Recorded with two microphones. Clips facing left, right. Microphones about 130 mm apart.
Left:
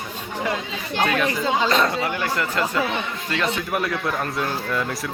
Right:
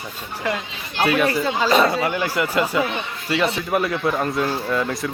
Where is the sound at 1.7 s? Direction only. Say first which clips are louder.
Right 3 dB; 5° right (ahead or behind).